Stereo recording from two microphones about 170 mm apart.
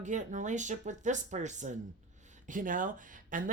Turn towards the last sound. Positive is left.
turn(degrees=-50)  # may be behind; listen again after turning